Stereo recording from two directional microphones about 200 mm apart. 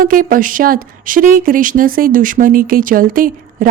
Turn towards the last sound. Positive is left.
turn(degrees=-45)  # may be behind; listen again after turning